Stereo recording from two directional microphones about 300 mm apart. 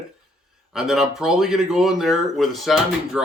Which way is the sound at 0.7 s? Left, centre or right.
Centre.